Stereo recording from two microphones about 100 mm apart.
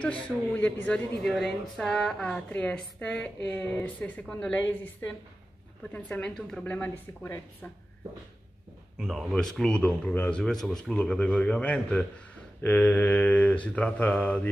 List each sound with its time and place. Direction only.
0.0 s a woman's voice: 15° left (ahead or behind)
8.9 s speech: 5° right (ahead or behind)
9.3 s a woman's voice: 5° left (ahead or behind)